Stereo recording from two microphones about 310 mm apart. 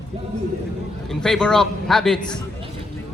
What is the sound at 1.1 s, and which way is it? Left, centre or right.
A man's voice, centre.